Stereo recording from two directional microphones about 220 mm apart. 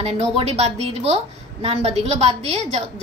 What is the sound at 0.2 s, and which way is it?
A woman's voice, 30° right (ahead or behind).